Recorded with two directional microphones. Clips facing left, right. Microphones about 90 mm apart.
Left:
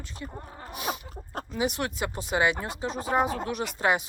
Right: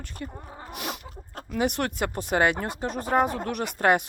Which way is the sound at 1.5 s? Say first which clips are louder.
Right 3 dB; 60° right (ahead or behind).